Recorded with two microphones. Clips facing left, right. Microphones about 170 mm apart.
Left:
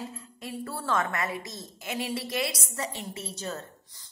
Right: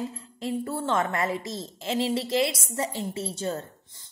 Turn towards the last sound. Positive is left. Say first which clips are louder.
# right 6 dB
turn(degrees=-30)  # may be behind; listen again after turning